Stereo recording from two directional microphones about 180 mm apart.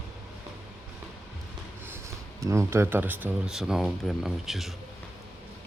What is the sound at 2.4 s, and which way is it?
Speech, 15° right (ahead or behind).